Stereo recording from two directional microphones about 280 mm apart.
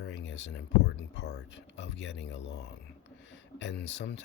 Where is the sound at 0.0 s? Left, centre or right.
Left.